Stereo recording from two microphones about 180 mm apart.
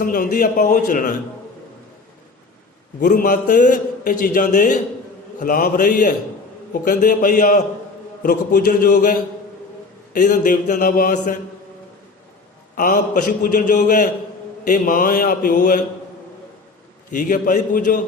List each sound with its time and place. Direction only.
0.0 s a man's voice: 45° left (ahead or behind)
3.1 s a man's voice: 45° left (ahead or behind)
12.7 s a man's voice: 45° left (ahead or behind)
17.1 s a man's voice: 45° left (ahead or behind)